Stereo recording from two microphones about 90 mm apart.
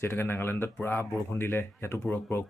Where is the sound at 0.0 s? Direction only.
25° left (ahead or behind).